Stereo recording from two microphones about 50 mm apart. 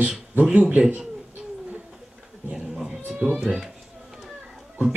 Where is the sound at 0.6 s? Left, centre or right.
Right.